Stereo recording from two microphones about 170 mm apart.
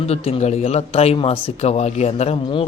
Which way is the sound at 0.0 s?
40° left (ahead or behind).